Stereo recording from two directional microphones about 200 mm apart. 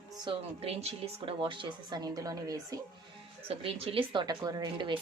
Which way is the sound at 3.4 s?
30° right (ahead or behind).